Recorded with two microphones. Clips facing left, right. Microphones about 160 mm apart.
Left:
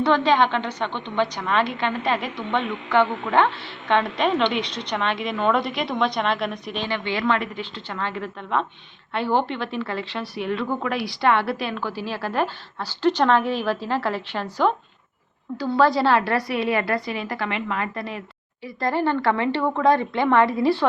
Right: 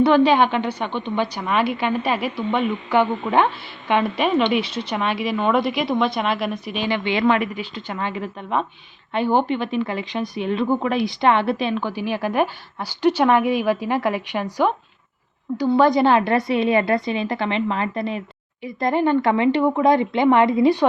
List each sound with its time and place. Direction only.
0.0 s a woman's voice: 10° right (ahead or behind)